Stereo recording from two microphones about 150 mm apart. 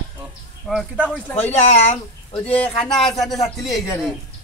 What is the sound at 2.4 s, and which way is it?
Speech, 10° left (ahead or behind).